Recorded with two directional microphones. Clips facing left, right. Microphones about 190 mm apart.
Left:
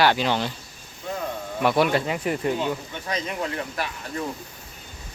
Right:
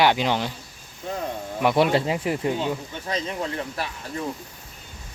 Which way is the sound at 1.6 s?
20° right (ahead or behind).